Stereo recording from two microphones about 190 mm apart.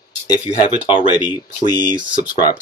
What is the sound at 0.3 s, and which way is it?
Speech, 25° left (ahead or behind).